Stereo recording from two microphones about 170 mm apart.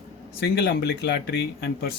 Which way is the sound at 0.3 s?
70° left (ahead or behind).